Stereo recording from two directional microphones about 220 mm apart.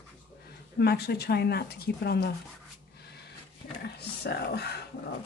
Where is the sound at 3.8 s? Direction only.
45° left (ahead or behind).